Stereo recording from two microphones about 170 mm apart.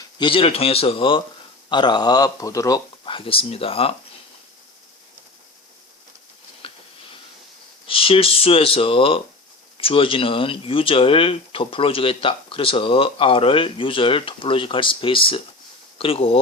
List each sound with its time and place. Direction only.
0.2 s a man's voice: 30° left (ahead or behind)
6.6 s a sound: 35° left (ahead or behind)
7.9 s speech: 30° left (ahead or behind)